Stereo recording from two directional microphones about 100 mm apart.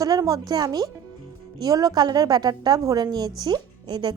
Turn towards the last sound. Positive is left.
turn(degrees=-45)  # may be behind; listen again after turning